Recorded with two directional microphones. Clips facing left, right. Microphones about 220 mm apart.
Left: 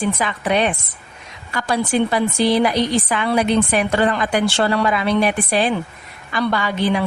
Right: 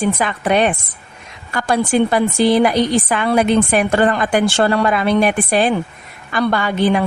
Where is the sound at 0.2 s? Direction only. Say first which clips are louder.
Right 3 dB; 50° right (ahead or behind).